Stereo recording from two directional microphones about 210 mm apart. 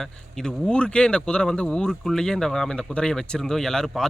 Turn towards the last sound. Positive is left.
turn(degrees=0)  # may be behind; listen again after turning